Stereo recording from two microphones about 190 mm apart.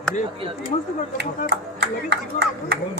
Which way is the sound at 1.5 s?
60° right (ahead or behind).